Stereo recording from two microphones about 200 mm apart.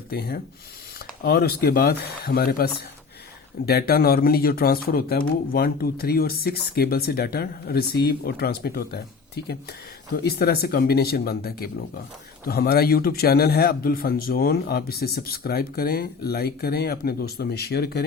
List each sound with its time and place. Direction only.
0.1 s speech: 50° left (ahead or behind)